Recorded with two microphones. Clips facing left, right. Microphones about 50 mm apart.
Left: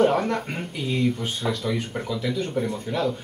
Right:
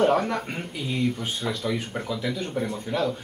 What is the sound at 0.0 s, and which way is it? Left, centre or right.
Speech, centre.